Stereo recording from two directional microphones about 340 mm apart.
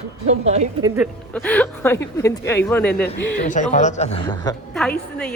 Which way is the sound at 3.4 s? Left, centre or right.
Left.